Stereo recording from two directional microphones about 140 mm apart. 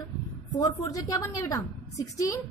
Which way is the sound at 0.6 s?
25° left (ahead or behind).